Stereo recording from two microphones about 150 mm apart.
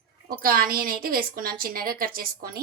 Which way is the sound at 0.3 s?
75° right (ahead or behind).